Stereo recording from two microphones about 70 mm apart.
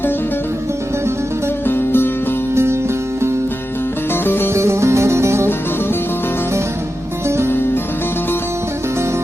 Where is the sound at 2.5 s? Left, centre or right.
Right.